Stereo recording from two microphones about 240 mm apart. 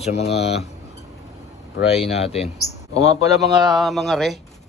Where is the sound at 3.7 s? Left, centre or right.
Centre.